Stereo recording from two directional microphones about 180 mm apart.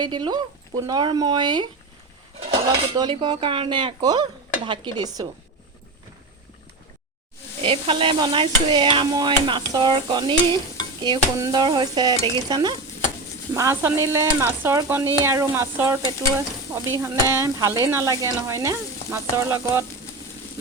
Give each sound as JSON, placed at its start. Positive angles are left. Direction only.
{"t": 0.0, "sound": "stir", "side_deg": -25}
{"t": 2.9, "sound": "stir", "side_deg": -25}
{"t": 7.6, "sound": "stir", "side_deg": -30}